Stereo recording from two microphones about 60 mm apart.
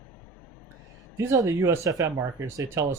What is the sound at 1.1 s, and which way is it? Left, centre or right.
Speech, right.